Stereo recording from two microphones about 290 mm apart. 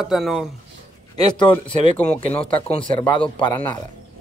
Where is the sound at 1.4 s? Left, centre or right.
Centre.